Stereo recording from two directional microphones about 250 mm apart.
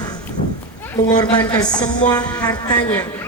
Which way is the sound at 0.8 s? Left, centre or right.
Centre.